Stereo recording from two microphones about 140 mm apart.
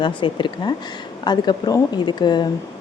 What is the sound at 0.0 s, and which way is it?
Speech, 35° left (ahead or behind).